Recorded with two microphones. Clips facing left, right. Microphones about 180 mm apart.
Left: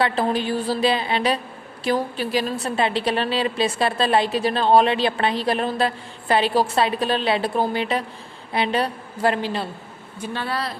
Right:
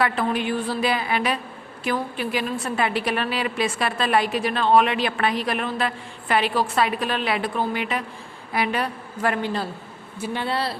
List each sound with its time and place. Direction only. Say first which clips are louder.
0.0 s a woman's voice: left 2 dB; 30° left (ahead or behind)
10.2 s speech: right 1 dB; 10° right (ahead or behind)
10.4 s speech: right 2 dB; 30° right (ahead or behind)